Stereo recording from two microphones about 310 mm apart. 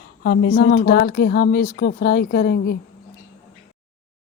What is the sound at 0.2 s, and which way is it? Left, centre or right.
A woman's voice, left.